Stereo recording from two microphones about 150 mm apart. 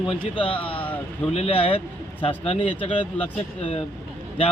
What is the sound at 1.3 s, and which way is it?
Speech, 40° left (ahead or behind).